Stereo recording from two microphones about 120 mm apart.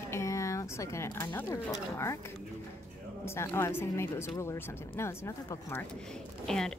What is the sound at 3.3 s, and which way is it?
Speech, 20° left (ahead or behind).